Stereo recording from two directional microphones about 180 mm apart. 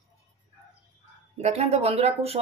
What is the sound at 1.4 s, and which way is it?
Speech, 35° right (ahead or behind).